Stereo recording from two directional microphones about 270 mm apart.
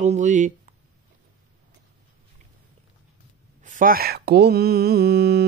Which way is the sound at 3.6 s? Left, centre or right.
Right.